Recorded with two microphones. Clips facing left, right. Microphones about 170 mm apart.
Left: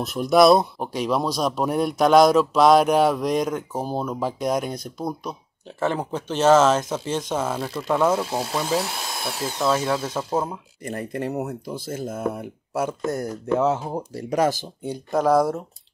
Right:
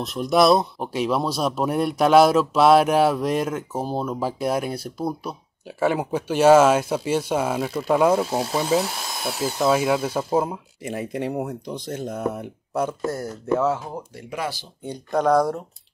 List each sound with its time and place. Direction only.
0.0 s speech: centre (ahead or behind)
13.1 s speech: 20° left (ahead or behind)
13.9 s speech: 35° left (ahead or behind)
14.9 s speech: 5° left (ahead or behind)